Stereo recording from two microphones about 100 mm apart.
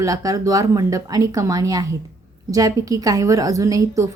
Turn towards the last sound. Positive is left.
turn(degrees=-35)  # may be behind; listen again after turning